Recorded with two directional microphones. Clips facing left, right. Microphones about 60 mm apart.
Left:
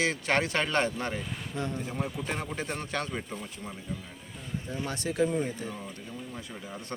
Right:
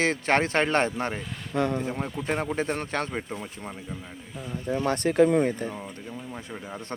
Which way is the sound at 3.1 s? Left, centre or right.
Right.